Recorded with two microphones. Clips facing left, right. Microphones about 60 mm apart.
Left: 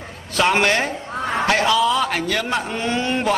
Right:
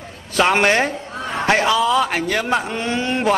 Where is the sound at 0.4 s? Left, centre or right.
Centre.